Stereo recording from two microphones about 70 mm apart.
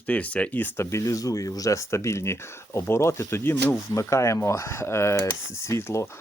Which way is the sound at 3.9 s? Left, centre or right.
Left.